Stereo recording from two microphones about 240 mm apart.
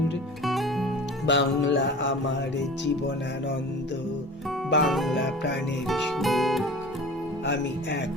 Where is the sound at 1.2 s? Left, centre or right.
Left.